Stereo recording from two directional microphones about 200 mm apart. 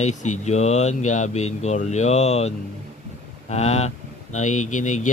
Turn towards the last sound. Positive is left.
turn(degrees=40)  # may be behind; listen again after turning